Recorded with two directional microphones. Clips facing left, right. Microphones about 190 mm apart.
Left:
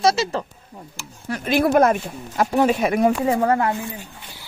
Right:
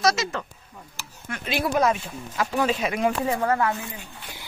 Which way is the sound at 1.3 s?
45° left (ahead or behind).